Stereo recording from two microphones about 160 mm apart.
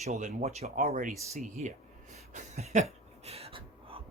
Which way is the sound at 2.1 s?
45° right (ahead or behind).